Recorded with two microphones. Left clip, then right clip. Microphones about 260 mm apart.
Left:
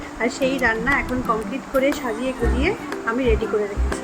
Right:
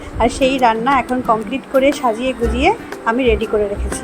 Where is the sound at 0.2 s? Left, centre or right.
Right.